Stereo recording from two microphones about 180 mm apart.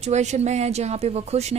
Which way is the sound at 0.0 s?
40° right (ahead or behind).